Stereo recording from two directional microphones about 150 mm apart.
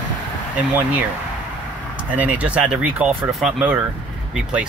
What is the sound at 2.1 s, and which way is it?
Speech, 10° right (ahead or behind).